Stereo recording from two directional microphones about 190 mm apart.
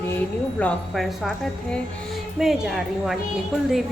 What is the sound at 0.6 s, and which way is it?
Speech, centre (ahead or behind).